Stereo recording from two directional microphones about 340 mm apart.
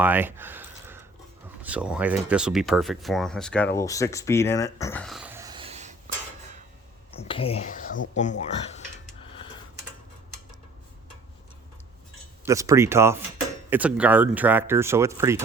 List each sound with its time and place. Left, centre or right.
0.0 s a sound: centre
1.6 s speech: centre
7.2 s speech: centre
12.5 s speech: centre